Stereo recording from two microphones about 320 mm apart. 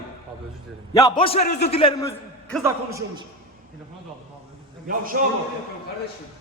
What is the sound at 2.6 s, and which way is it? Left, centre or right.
Speech, centre.